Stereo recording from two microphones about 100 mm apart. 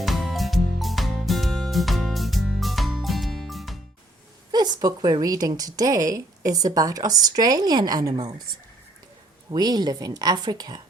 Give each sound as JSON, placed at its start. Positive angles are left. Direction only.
{"t": 0.0, "sound": "music", "side_deg": 0}
{"t": 4.5, "sound": "a woman's voice", "side_deg": -45}
{"t": 9.5, "sound": "a woman's voice", "side_deg": -45}